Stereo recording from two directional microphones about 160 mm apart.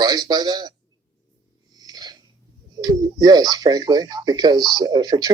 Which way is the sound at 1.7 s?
25° right (ahead or behind).